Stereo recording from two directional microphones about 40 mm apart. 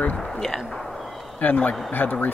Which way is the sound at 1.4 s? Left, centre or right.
Left.